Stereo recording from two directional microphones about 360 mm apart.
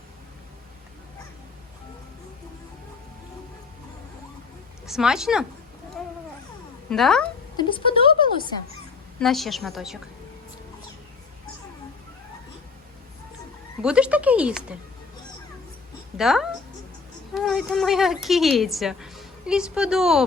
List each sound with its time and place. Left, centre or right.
4.9 s a woman's voice: centre
6.9 s a woman's voice: centre
7.5 s speech: centre
9.2 s a woman's voice: centre
13.8 s a woman's voice: centre
16.1 s a woman's voice: centre